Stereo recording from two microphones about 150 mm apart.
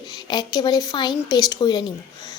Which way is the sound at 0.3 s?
30° left (ahead or behind).